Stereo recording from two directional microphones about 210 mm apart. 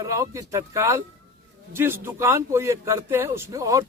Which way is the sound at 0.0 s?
15° right (ahead or behind).